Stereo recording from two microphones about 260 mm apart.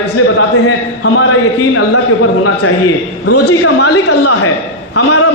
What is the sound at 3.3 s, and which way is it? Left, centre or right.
Speech, left.